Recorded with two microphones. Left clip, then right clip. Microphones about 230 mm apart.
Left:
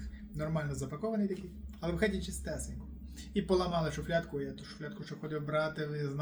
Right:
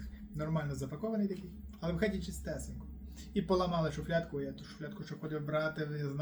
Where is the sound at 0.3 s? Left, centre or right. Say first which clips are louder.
Left 1 dB; centre.